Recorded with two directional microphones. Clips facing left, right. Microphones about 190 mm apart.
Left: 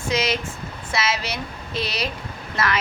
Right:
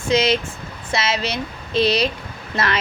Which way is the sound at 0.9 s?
25° right (ahead or behind).